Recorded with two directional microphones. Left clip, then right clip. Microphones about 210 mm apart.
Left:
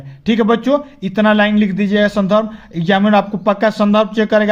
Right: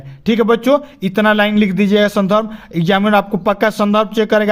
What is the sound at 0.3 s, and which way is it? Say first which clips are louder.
Speech: right 2 dB; 25° right (ahead or behind).